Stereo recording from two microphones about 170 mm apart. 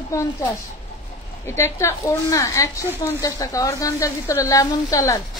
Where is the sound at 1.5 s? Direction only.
15° left (ahead or behind).